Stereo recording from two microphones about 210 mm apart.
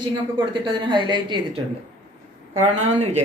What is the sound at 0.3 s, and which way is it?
Speech, 20° right (ahead or behind).